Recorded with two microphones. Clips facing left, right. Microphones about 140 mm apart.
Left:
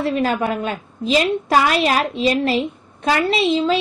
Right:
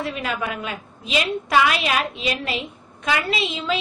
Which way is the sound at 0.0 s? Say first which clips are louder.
Left 7 dB; 30° left (ahead or behind).